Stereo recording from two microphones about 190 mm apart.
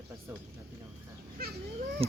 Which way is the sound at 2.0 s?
30° right (ahead or behind).